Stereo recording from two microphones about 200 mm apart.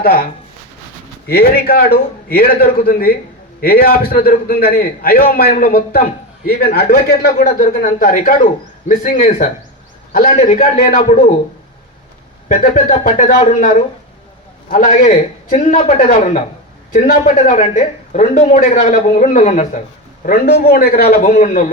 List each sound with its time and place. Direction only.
0.0 s a man's voice: 50° left (ahead or behind)
1.3 s a man's voice: 50° left (ahead or behind)
12.6 s speech: 40° left (ahead or behind)
20.2 s a man's voice: 50° left (ahead or behind)